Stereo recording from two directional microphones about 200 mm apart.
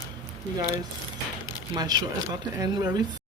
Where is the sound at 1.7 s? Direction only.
20° right (ahead or behind).